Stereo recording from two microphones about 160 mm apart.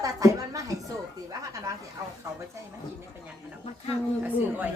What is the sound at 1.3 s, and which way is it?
Speech, 20° right (ahead or behind).